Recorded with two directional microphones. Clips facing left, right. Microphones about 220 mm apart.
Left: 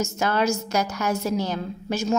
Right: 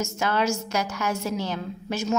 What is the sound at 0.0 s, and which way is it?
A woman's voice, 40° left (ahead or behind).